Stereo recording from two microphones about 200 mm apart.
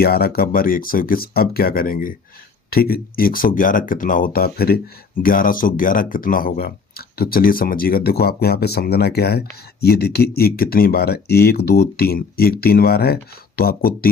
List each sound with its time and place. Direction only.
0.0 s speech: 50° left (ahead or behind)